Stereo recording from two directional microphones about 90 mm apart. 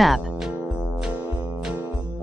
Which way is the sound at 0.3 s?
15° right (ahead or behind).